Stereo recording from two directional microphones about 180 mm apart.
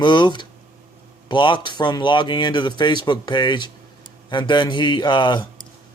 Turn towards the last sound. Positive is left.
turn(degrees=25)  # may be behind; listen again after turning